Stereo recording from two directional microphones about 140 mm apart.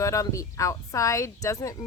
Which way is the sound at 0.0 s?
20° left (ahead or behind).